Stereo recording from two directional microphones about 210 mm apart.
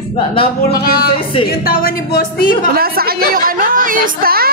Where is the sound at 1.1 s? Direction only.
25° left (ahead or behind).